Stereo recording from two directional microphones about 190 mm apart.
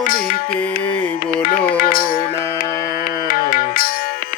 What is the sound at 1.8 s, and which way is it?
Music, 50° left (ahead or behind).